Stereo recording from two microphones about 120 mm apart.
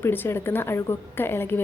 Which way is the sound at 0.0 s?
20° left (ahead or behind).